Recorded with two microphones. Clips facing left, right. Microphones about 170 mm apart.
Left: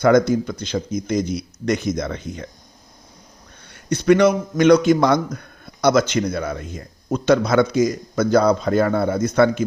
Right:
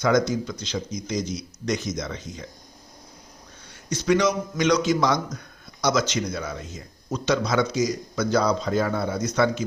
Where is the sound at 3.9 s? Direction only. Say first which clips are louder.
Left 7 dB; 60° left (ahead or behind).